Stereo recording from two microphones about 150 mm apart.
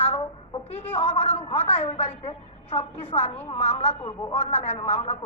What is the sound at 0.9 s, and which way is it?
A woman's voice, 40° left (ahead or behind).